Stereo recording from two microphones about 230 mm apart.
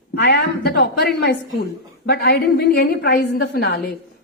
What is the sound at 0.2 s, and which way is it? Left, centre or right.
A woman's voice, left.